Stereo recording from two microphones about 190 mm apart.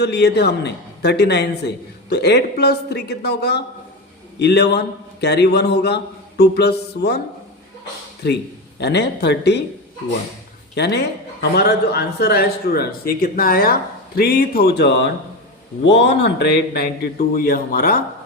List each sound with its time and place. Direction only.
0.0 s a man's voice: 60° left (ahead or behind)
8.2 s a man's voice: 60° left (ahead or behind)
10.8 s a man's voice: 60° left (ahead or behind)